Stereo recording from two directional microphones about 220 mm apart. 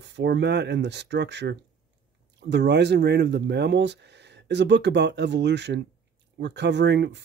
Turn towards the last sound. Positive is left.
turn(degrees=-50)  # may be behind; listen again after turning